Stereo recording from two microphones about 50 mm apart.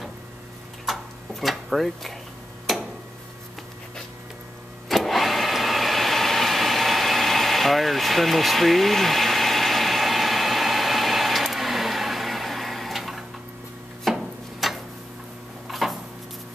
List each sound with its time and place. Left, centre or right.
0.8 s tick-tock: centre
4.8 s vehicle: centre
14.1 s a sound: centre